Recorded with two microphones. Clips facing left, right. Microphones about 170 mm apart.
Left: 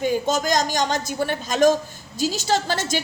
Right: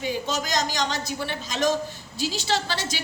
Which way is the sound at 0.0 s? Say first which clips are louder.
Left 6 dB; 45° left (ahead or behind).